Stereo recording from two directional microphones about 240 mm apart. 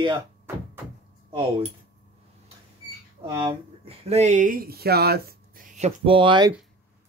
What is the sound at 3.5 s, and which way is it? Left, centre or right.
Speech, right.